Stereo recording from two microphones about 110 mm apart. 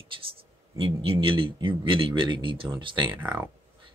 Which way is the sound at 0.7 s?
55° right (ahead or behind).